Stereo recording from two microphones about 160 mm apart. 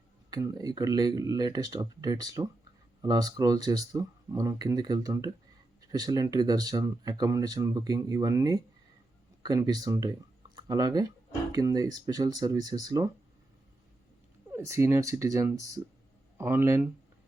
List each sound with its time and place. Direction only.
0.3 s speech: 25° right (ahead or behind)
14.5 s speech: 20° right (ahead or behind)